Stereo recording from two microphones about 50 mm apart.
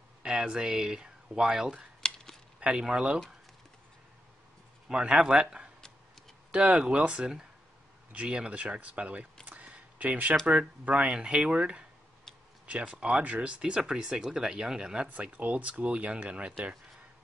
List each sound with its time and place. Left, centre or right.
0.2 s speech: centre
2.0 s chop: centre
2.6 s speech: centre
4.8 s speech: centre
9.6 s a sound: right
10.4 s speech: right
15.0 s speech: right